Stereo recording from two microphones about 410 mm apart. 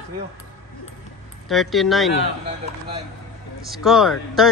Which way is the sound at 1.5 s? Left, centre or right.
Centre.